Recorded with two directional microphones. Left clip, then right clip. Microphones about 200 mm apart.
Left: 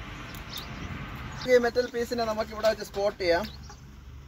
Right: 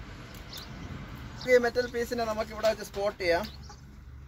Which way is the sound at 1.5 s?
10° right (ahead or behind).